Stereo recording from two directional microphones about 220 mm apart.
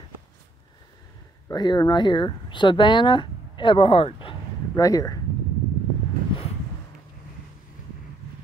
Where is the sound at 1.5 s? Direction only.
20° left (ahead or behind).